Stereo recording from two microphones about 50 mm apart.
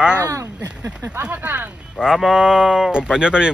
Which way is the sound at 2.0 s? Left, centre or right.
Centre.